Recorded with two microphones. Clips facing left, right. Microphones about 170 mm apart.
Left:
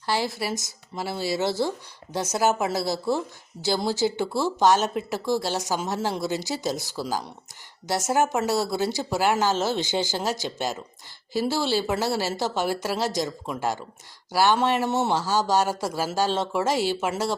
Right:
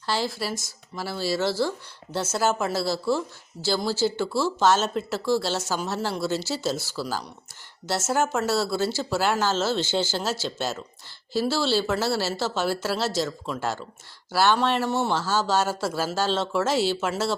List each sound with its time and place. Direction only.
0.0 s speech: 15° left (ahead or behind)